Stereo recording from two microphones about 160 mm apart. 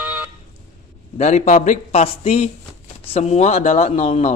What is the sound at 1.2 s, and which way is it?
Speech, 45° left (ahead or behind).